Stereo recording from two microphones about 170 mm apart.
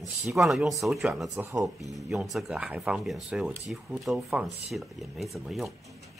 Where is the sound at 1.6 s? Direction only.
Centre (ahead or behind).